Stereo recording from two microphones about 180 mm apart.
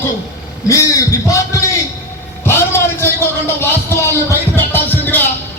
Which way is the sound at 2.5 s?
15° left (ahead or behind).